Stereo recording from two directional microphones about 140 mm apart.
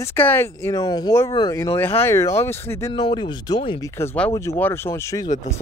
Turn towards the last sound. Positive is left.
turn(degrees=20)  # may be behind; listen again after turning